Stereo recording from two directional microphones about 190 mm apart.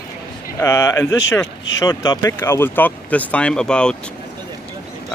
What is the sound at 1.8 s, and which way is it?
Speech, 20° left (ahead or behind).